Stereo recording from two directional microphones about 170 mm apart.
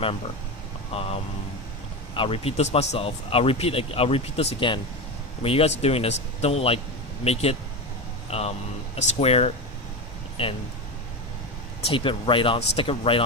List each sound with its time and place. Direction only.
0.9 s speech: 35° left (ahead or behind)
2.1 s speech: 30° left (ahead or behind)
8.3 s speech: 35° left (ahead or behind)
11.9 s speech: 30° left (ahead or behind)